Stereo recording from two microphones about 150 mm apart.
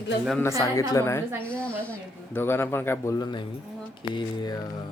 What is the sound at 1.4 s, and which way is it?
A man's voice, 10° left (ahead or behind).